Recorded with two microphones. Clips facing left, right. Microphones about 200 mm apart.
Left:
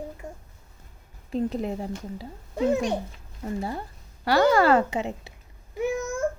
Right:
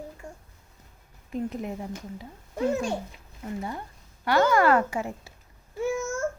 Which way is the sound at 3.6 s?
35° left (ahead or behind).